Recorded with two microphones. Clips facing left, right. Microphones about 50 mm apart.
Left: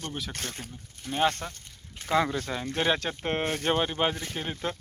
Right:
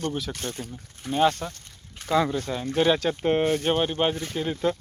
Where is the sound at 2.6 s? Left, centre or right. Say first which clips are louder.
Right 6 dB; left.